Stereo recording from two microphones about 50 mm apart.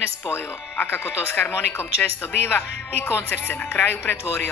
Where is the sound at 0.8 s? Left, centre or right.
Left.